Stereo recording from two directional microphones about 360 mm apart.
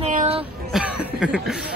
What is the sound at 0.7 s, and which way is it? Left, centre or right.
A man's voice, centre.